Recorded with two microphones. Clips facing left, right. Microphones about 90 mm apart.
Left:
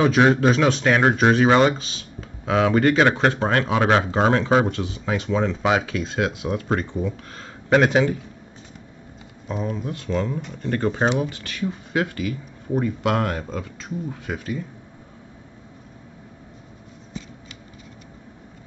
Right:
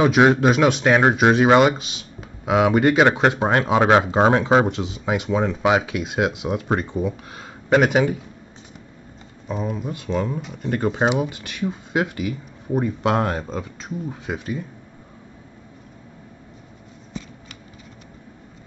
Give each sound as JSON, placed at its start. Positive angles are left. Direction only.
{"t": 0.0, "sound": "speech", "side_deg": -15}
{"t": 9.5, "sound": "speech", "side_deg": -5}